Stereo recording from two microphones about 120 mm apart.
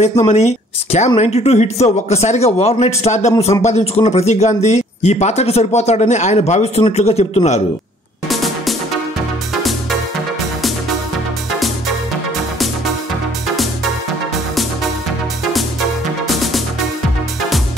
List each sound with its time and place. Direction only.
0.3 s speech: 70° left (ahead or behind)
8.3 s music: centre (ahead or behind)